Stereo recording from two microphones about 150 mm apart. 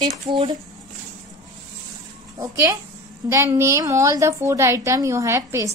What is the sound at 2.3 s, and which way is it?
A woman's voice, 25° right (ahead or behind).